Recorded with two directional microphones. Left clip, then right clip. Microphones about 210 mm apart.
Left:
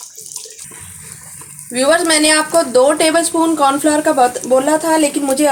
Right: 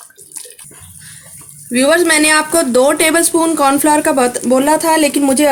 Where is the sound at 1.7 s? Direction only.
55° right (ahead or behind).